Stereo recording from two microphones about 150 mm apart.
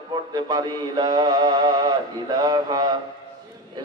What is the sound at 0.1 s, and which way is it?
Mantra, 25° right (ahead or behind).